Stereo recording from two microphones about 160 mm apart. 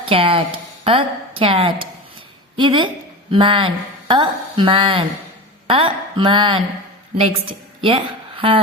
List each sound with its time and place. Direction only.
0.0 s a woman's voice: 35° right (ahead or behind)